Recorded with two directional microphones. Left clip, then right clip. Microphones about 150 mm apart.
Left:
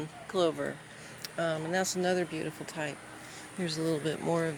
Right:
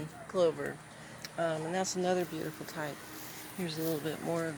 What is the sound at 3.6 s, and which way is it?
Speech, 65° left (ahead or behind).